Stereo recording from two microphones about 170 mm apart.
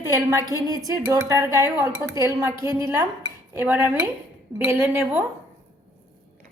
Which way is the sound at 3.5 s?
15° right (ahead or behind).